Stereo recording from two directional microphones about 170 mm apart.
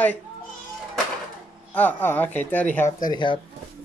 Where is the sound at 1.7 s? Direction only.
10° left (ahead or behind).